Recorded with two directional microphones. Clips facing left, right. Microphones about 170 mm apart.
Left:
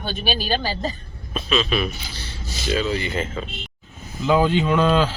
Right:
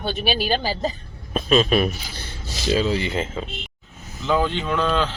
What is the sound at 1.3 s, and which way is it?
A man's voice, 45° right (ahead or behind).